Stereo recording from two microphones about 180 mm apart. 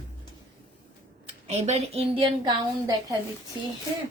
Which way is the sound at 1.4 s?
40° right (ahead or behind).